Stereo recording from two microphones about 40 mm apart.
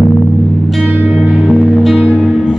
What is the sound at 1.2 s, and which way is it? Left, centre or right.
Music, right.